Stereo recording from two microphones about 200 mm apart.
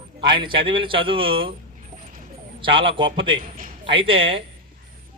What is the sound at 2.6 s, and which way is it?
Speech, 25° right (ahead or behind).